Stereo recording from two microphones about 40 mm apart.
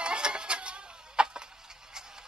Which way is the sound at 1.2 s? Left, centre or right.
Right.